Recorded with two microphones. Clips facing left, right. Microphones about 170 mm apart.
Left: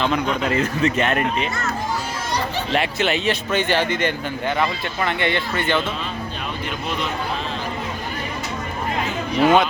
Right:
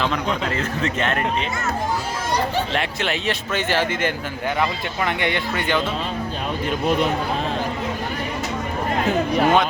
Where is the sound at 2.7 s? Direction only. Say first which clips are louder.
Left 3 dB; 5° left (ahead or behind).